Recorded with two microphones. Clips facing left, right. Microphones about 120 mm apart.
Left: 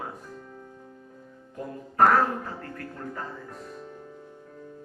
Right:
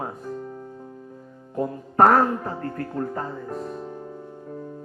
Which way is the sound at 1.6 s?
40° right (ahead or behind).